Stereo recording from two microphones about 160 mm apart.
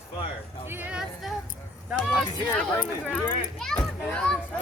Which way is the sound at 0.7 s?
10° right (ahead or behind).